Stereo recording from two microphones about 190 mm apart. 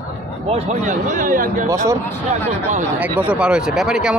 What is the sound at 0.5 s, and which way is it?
Speech, 35° right (ahead or behind).